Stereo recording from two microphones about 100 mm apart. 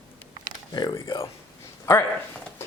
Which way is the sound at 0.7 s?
45° left (ahead or behind).